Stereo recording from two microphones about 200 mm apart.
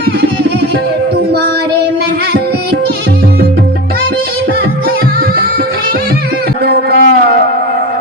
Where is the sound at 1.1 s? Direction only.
55° right (ahead or behind).